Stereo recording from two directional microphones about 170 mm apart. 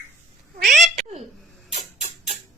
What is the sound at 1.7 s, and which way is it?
Rodents, 40° right (ahead or behind).